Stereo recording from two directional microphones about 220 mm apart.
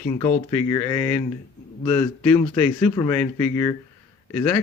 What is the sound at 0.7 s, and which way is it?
Speech, 15° left (ahead or behind).